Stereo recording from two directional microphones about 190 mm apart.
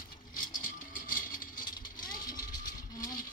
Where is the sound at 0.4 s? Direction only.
45° left (ahead or behind).